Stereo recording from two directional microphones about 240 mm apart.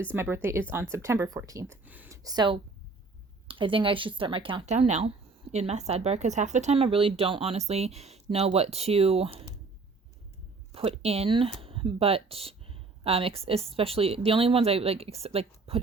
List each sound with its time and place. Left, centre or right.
0.1 s speech: centre
10.7 s speech: right